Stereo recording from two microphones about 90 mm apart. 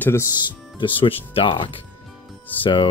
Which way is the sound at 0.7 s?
75° left (ahead or behind).